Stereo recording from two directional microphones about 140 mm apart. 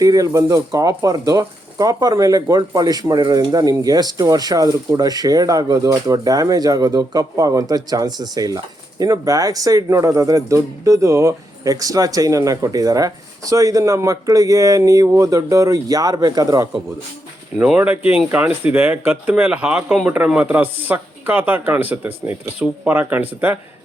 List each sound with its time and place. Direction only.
0.0 s speech: 25° right (ahead or behind)
17.6 s speech: 10° right (ahead or behind)